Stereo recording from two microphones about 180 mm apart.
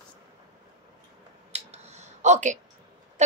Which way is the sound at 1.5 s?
35° right (ahead or behind).